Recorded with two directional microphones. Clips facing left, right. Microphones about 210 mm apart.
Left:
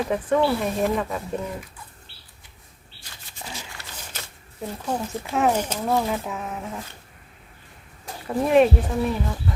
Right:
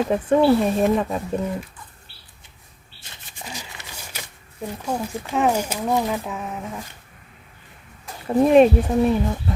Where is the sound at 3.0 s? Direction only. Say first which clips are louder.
Right 1 dB; 20° right (ahead or behind).